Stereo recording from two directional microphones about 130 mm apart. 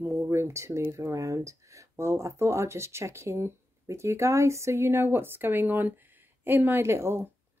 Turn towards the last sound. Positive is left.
turn(degrees=-20)  # may be behind; listen again after turning